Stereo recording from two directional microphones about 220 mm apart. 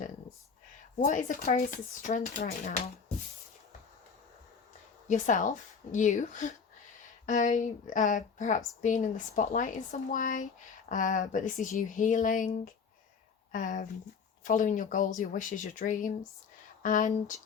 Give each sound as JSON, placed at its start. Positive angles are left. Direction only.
{"t": 0.9, "sound": "a woman's voice", "side_deg": 35}
{"t": 5.0, "sound": "a woman's voice", "side_deg": 35}